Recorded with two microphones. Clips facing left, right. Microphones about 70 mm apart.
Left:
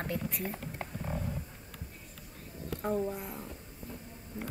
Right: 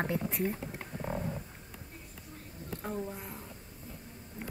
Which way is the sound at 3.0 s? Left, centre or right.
Centre.